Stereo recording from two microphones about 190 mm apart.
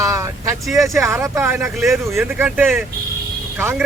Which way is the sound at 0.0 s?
15° right (ahead or behind).